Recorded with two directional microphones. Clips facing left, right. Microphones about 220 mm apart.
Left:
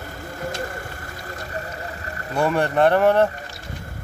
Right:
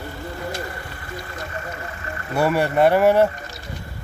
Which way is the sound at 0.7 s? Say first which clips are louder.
Even; 45° left (ahead or behind).